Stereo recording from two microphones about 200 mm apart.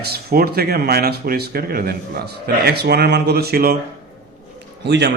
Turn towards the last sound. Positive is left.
turn(degrees=-55)  # may be behind; listen again after turning